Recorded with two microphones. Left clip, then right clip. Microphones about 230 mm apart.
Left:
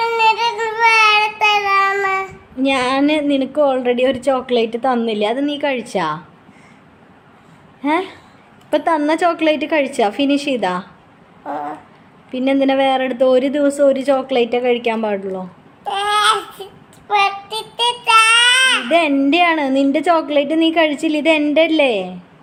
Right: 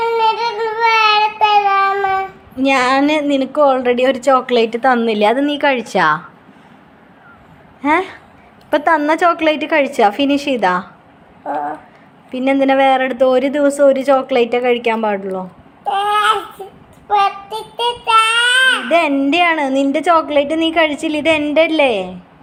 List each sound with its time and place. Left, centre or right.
0.0 s child singing: left
2.6 s a woman's voice: centre
7.8 s a woman's voice: centre
11.4 s a sound: left
12.3 s a woman's voice: centre
15.8 s babbling: left
17.7 s child singing: centre
18.9 s a woman's voice: centre